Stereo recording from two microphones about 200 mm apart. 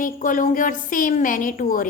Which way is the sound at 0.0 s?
40° left (ahead or behind).